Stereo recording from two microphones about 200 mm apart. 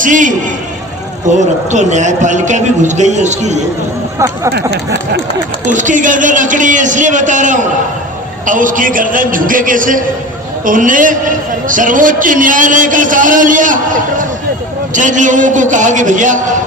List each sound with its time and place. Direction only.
0.0 s a man's voice: 40° right (ahead or behind)
1.4 s a man's voice: 35° right (ahead or behind)
4.2 s speech: 15° right (ahead or behind)
5.6 s a man's voice: 40° right (ahead or behind)